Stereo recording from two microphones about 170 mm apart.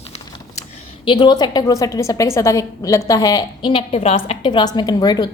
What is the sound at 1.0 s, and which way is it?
A woman's voice, 25° left (ahead or behind).